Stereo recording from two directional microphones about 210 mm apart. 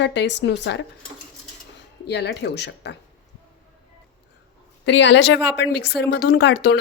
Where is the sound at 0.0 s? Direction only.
55° left (ahead or behind).